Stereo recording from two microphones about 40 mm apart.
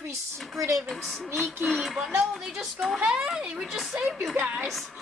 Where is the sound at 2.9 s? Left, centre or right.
Right.